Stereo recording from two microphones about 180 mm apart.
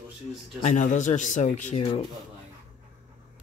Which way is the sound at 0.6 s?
40° left (ahead or behind).